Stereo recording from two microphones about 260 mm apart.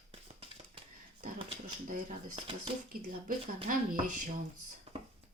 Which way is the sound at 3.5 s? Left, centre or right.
Right.